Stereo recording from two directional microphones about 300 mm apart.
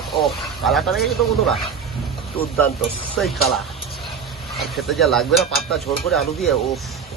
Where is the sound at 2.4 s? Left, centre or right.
Centre.